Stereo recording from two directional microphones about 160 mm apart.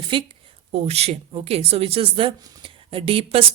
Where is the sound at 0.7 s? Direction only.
40° right (ahead or behind).